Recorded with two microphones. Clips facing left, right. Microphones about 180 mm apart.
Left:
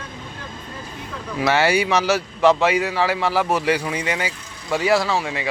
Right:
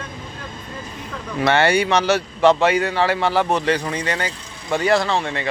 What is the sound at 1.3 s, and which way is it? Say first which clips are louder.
Speech: right 1 dB; 5° left (ahead or behind).